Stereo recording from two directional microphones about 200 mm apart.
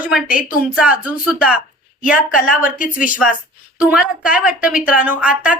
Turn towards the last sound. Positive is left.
turn(degrees=-5)  # may be behind; listen again after turning